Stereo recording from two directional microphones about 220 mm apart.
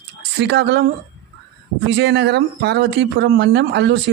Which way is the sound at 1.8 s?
50° right (ahead or behind).